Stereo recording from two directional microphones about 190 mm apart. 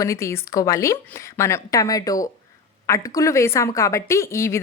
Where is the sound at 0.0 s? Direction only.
15° left (ahead or behind).